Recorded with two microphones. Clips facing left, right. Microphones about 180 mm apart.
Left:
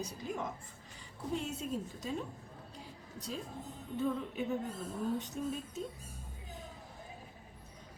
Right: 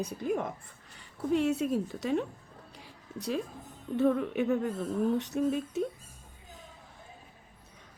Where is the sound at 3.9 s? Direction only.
70° right (ahead or behind).